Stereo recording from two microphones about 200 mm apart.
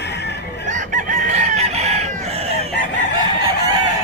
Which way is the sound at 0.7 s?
40° right (ahead or behind).